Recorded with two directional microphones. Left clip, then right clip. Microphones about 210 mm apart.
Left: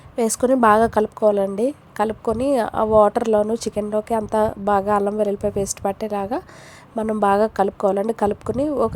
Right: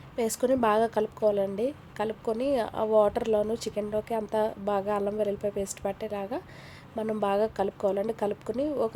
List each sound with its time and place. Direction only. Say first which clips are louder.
0.2 s a woman's voice: left 8 dB; 25° left (ahead or behind)